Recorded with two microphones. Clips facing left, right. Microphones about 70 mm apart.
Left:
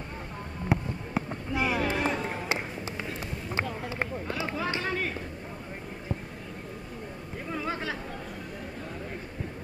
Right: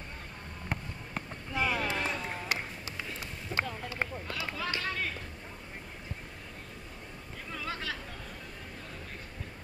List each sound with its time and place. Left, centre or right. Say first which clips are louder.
0.7 s music: left 9 dB; centre
1.3 s run: left 1 dB; centre
7.5 s a sound: left 5 dB; left